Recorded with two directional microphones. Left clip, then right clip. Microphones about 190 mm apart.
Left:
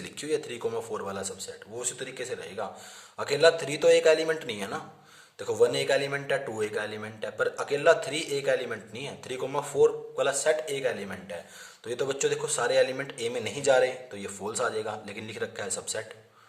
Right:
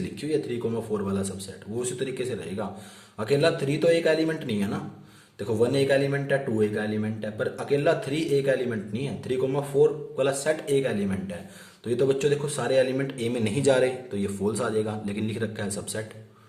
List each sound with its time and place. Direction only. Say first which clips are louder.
0.0 s a man's voice: right 3 dB; 35° left (ahead or behind); by 16.0 s 20° left (ahead or behind)